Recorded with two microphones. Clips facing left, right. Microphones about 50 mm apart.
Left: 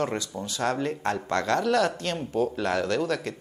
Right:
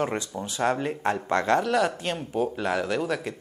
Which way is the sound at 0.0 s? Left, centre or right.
Centre.